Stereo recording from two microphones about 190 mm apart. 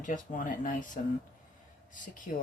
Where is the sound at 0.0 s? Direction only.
45° left (ahead or behind).